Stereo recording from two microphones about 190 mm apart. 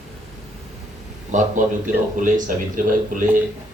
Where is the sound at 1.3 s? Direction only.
40° right (ahead or behind).